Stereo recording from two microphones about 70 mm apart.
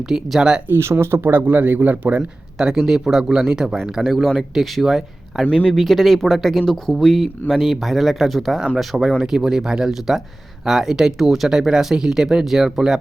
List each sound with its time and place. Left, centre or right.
0.1 s speech: centre
0.7 s speech: right
2.6 s speech: centre
5.5 s speech: centre
5.7 s speech: centre